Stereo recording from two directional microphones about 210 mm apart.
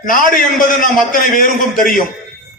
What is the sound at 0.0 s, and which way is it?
A man's voice, 40° left (ahead or behind).